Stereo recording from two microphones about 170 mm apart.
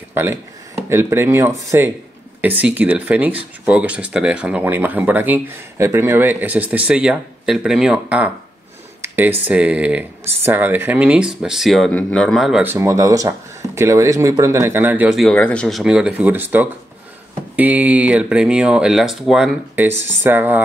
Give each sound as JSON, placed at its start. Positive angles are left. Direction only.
{"t": 0.1, "sound": "speech", "side_deg": -15}
{"t": 12.6, "sound": "speech", "side_deg": -15}